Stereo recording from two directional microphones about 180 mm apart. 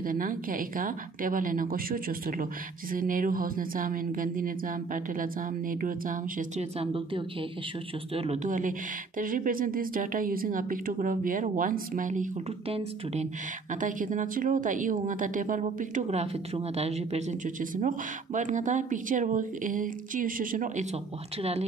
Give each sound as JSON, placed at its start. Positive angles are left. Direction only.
{"t": 0.0, "sound": "speech", "side_deg": -50}
{"t": 6.8, "sound": "speech", "side_deg": -30}
{"t": 8.5, "sound": "speech", "side_deg": -45}
{"t": 12.6, "sound": "speech", "side_deg": -35}
{"t": 13.7, "sound": "speech", "side_deg": -45}
{"t": 21.4, "sound": "speech", "side_deg": -35}